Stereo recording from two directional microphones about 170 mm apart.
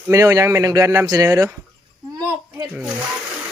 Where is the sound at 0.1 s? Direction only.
20° right (ahead or behind).